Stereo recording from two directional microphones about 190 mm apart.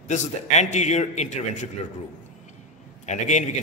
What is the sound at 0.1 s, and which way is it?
A man's voice, 40° left (ahead or behind).